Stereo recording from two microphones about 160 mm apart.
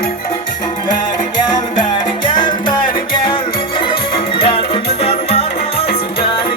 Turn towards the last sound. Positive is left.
turn(degrees=40)  # may be behind; listen again after turning